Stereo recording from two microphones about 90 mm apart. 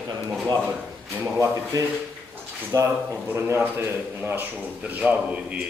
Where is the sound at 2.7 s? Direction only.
30° right (ahead or behind); by 5.6 s 15° right (ahead or behind).